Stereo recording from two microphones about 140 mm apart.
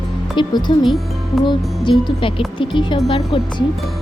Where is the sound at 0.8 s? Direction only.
Centre (ahead or behind).